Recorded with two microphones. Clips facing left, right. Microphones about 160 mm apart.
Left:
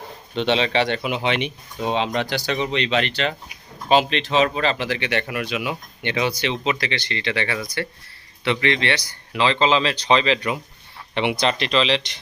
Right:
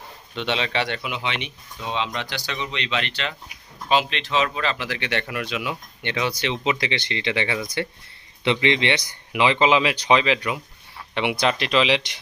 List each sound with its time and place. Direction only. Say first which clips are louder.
0.3 s a man's voice: left 5 dB; 30° left (ahead or behind)
1.0 s speech: left 6 dB; 45° left (ahead or behind); by 6.5 s 15° left (ahead or behind)
6.5 s speech: even; 15° right (ahead or behind)